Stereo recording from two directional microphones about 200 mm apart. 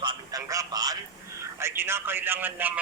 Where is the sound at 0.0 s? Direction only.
20° right (ahead or behind).